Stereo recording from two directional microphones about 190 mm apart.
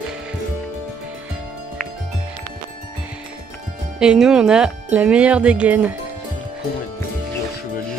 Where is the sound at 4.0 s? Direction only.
5° right (ahead or behind).